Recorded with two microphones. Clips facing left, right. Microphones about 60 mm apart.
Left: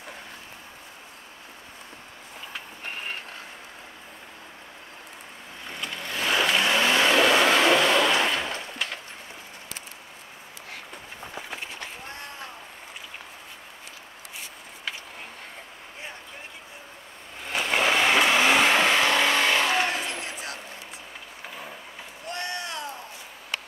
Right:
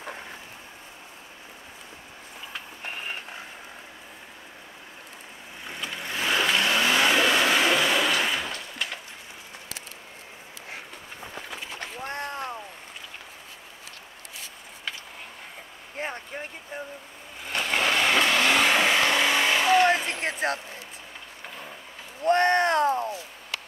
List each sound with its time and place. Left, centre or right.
2.5 s vehicle: centre
5.7 s vehicle: centre
8.2 s a sound: centre
8.7 s wood: centre
11.8 s skateboard: right
16.0 s vehicle: right
17.4 s vehicle: centre
20.1 s a sound: right
21.5 s vehicle: centre
22.2 s a sound: right